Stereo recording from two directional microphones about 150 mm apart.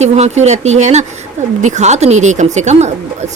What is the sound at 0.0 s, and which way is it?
Speech, 50° right (ahead or behind).